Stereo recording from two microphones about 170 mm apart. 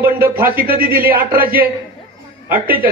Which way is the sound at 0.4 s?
60° right (ahead or behind).